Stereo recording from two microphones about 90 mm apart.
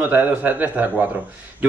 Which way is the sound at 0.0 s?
20° right (ahead or behind).